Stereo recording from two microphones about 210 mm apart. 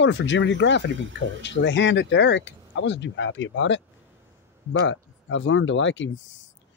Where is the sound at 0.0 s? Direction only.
60° left (ahead or behind).